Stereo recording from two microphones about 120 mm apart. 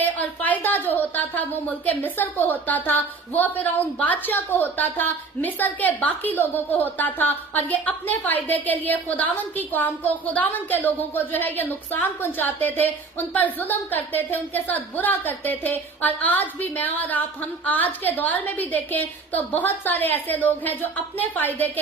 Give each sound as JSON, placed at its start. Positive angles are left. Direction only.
{"t": 0.0, "sound": "a woman's voice", "side_deg": 15}